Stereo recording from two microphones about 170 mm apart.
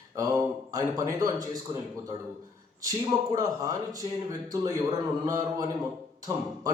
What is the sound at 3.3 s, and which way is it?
Speech, 20° right (ahead or behind).